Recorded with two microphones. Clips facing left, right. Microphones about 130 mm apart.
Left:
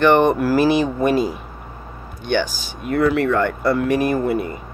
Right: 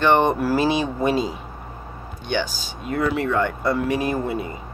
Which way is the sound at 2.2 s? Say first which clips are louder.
Left 4 dB; 65° left (ahead or behind).